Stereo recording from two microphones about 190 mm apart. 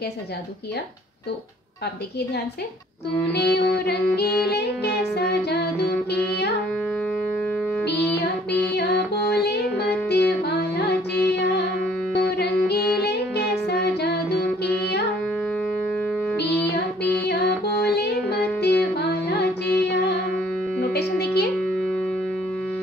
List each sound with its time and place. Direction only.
3.3 s music: 60° left (ahead or behind)
7.8 s music: 5° left (ahead or behind)
8.7 s music: 60° left (ahead or behind)
17.0 s music: 60° left (ahead or behind)